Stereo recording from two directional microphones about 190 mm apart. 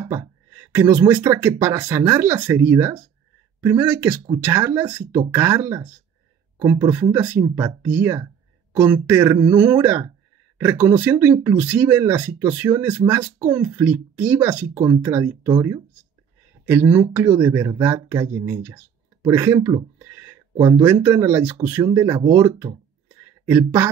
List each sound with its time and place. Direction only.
0.0 s speech: 15° right (ahead or behind)
22.4 s speech: 20° right (ahead or behind)
23.4 s speech: 10° right (ahead or behind)